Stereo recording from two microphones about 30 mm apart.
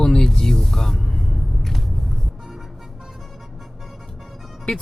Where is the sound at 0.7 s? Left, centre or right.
Centre.